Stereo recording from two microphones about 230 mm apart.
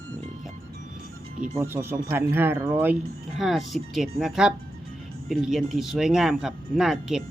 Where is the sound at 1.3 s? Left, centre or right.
Right.